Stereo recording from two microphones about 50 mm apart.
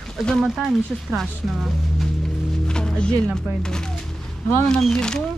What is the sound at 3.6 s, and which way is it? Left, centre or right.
Speech, centre.